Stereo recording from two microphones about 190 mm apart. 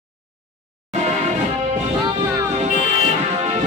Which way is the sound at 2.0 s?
20° right (ahead or behind).